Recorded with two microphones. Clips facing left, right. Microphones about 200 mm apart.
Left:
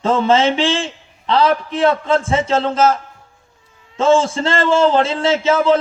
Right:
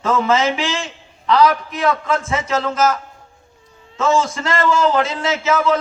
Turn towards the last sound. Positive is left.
turn(degrees=30)  # may be behind; listen again after turning